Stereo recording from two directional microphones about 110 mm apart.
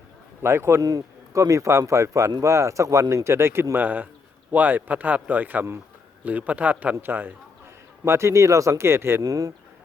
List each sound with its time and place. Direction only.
0.4 s a man's voice: 25° right (ahead or behind)
9.2 s speech: 35° right (ahead or behind)